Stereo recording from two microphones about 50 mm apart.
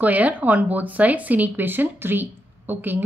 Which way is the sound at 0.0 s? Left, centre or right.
Right.